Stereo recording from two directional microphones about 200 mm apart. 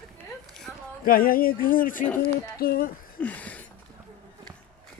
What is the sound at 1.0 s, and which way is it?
Music, 45° left (ahead or behind).